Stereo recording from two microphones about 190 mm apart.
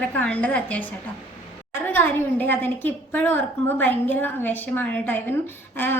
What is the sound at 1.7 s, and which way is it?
A woman's voice, 10° left (ahead or behind).